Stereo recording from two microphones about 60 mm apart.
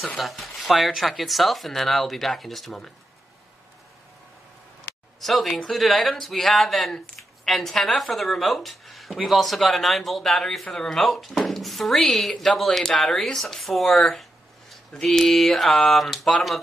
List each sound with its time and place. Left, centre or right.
0.2 s speech: centre
4.9 s a sound: left
5.2 s speech: centre